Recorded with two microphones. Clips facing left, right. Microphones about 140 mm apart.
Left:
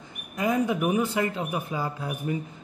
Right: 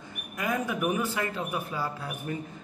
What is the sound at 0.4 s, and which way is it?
A man's voice, 20° left (ahead or behind).